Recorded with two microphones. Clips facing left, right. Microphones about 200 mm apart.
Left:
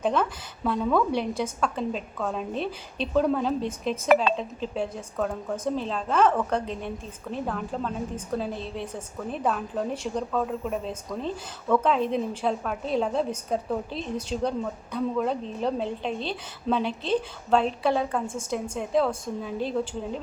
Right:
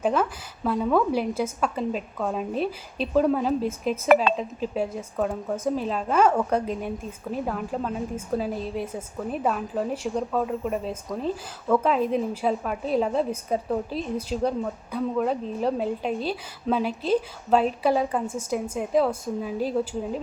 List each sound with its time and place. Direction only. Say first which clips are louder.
0.0 s a woman's voice: right 1 dB; 5° right (ahead or behind)